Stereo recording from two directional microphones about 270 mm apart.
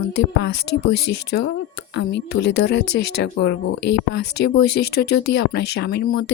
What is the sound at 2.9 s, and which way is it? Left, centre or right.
Speech, left.